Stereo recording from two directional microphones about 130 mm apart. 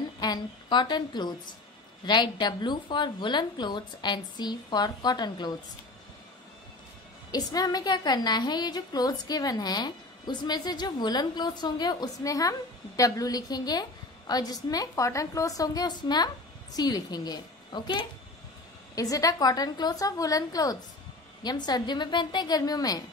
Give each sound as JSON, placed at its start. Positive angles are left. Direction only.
{"t": 0.2, "sound": "a woman's voice", "side_deg": 35}
{"t": 7.2, "sound": "a woman's voice", "side_deg": 30}